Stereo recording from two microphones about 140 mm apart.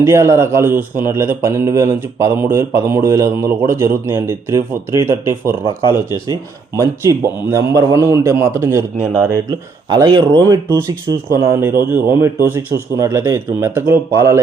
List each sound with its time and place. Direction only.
0.0 s speech: 20° right (ahead or behind)
9.5 s speech: 30° right (ahead or behind)